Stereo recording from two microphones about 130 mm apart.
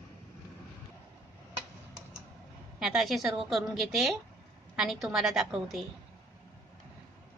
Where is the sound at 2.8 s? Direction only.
5° right (ahead or behind).